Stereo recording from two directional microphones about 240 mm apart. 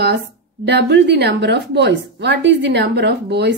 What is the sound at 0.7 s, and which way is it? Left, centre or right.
A woman's voice, right.